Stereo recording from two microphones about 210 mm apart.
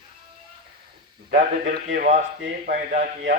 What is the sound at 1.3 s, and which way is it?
A man's voice, 45° right (ahead or behind).